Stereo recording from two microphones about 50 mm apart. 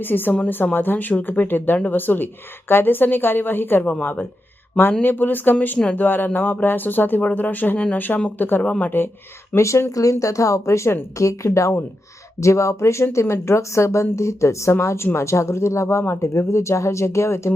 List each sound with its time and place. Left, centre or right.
0.0 s a woman's voice: left
9.6 s a woman's voice: left